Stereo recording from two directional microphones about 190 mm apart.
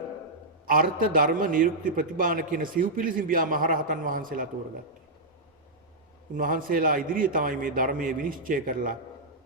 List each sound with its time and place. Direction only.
0.7 s a man's voice: 45° right (ahead or behind)
6.3 s a man's voice: 45° right (ahead or behind)